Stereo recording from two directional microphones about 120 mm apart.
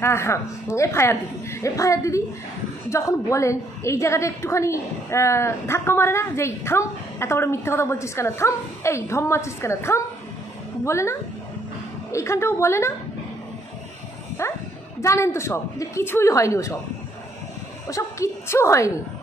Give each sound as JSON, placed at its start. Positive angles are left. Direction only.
{"t": 0.0, "sound": "a woman's voice", "side_deg": 20}
{"t": 14.4, "sound": "a woman's voice", "side_deg": 25}
{"t": 17.8, "sound": "a woman's voice", "side_deg": 25}